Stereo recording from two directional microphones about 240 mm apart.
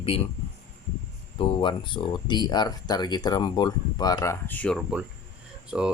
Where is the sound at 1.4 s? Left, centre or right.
Left.